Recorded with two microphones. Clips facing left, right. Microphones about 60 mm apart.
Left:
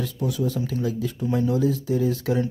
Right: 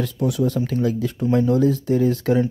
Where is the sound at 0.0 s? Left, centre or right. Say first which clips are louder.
Right 5 dB; right.